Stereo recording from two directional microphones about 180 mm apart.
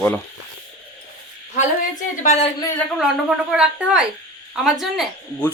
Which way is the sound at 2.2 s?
40° left (ahead or behind).